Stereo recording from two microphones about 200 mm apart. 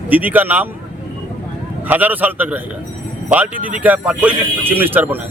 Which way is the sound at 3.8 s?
5° right (ahead or behind).